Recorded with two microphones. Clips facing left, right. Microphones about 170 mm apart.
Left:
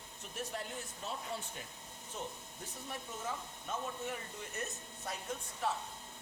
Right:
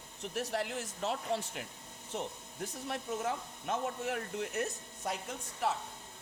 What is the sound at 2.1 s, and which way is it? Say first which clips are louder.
Speech: right 6 dB; 75° right (ahead or behind).